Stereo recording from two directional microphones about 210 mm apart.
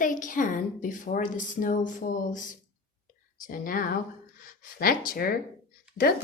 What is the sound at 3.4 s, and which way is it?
Speech, 40° left (ahead or behind).